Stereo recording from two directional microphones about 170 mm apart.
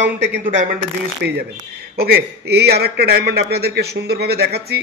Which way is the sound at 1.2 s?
75° right (ahead or behind).